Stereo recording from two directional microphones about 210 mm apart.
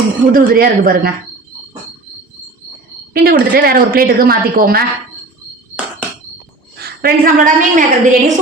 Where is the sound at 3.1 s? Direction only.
45° right (ahead or behind).